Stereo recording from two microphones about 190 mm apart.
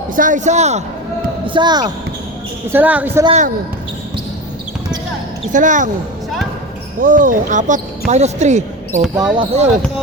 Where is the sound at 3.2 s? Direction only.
35° right (ahead or behind).